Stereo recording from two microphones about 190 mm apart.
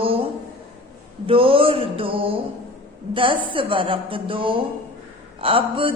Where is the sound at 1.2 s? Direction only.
30° right (ahead or behind).